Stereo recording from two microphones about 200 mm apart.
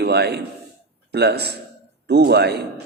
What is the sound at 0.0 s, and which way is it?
A man's voice, 55° right (ahead or behind).